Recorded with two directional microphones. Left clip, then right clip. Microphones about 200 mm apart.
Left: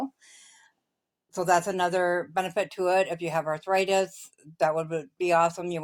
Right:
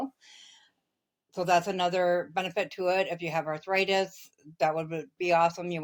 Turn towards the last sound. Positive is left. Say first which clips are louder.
# left 1 dB
turn(degrees=35)  # may be behind; listen again after turning